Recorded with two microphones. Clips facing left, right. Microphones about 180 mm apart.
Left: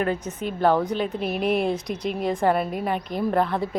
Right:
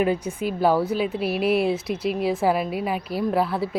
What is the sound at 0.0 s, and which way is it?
A woman's voice, 10° right (ahead or behind).